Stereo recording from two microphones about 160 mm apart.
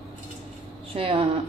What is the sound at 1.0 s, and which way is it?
Speech, 35° right (ahead or behind).